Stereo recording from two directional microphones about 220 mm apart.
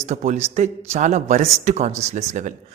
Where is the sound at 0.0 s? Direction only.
30° right (ahead or behind).